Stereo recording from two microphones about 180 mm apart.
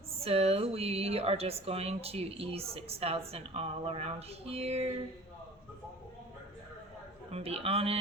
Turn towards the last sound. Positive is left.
turn(degrees=-35)  # may be behind; listen again after turning